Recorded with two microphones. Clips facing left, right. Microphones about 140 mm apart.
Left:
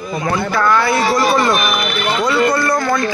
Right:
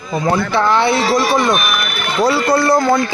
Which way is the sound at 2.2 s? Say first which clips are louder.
Right 3 dB; 35° right (ahead or behind).